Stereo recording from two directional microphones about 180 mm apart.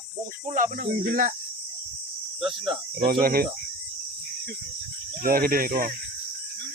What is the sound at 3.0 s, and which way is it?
Speech, 55° right (ahead or behind).